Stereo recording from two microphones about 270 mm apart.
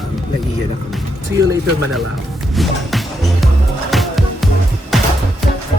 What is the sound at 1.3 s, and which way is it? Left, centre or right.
Speech, centre.